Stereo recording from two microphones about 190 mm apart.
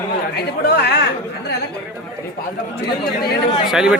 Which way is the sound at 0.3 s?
55° left (ahead or behind).